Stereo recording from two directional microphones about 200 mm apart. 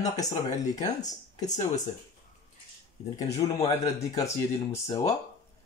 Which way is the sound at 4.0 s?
15° left (ahead or behind).